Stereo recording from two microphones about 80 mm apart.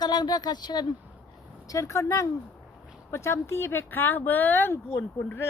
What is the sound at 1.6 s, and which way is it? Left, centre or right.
Speech, left.